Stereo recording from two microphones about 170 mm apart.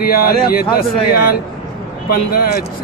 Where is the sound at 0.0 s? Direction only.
60° left (ahead or behind).